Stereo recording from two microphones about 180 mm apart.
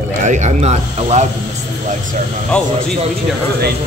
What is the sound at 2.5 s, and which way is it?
Speech, 5° left (ahead or behind).